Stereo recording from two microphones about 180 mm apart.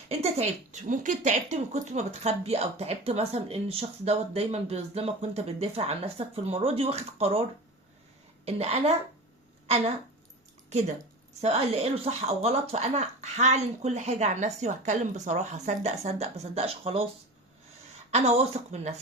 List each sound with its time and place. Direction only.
0.1 s a woman's voice: 35° right (ahead or behind)
8.4 s a woman's voice: 35° right (ahead or behind)
11.3 s a woman's voice: 35° right (ahead or behind)
18.1 s a woman's voice: 35° right (ahead or behind)